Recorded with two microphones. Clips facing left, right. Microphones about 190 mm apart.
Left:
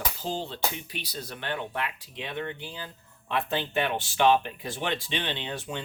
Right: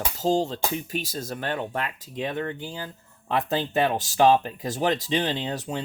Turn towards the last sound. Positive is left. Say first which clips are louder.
# right 5 dB
turn(degrees=-40)  # may be behind; listen again after turning